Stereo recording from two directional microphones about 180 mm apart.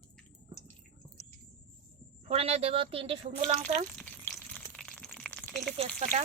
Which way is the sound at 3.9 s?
5° left (ahead or behind).